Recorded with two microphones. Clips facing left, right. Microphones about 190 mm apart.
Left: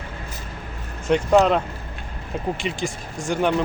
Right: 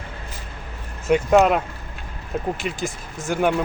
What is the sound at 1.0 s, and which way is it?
Speech, 5° right (ahead or behind).